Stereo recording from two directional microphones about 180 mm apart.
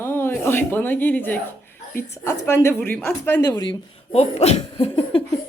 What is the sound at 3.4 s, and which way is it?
Speech, 25° left (ahead or behind).